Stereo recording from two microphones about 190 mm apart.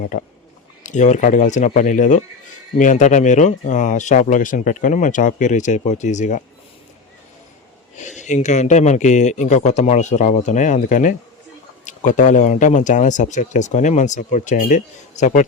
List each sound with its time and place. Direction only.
0.0 s speech: 50° left (ahead or behind)
7.9 s speech: 40° left (ahead or behind)